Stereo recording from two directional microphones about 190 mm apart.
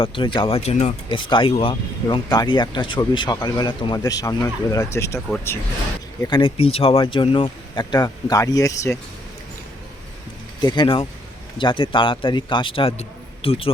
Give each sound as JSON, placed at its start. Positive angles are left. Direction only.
{"t": 0.0, "sound": "speech", "side_deg": 25}
{"t": 6.2, "sound": "speech", "side_deg": 25}
{"t": 10.6, "sound": "speech", "side_deg": 25}